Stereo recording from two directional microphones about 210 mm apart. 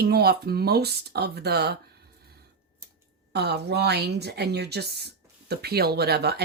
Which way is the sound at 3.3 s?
50° right (ahead or behind).